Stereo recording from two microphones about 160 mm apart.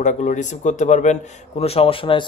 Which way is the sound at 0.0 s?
50° left (ahead or behind).